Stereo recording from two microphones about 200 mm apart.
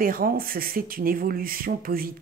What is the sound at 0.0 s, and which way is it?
Speech, 45° right (ahead or behind).